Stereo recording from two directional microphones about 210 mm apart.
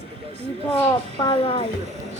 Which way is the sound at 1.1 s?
25° left (ahead or behind).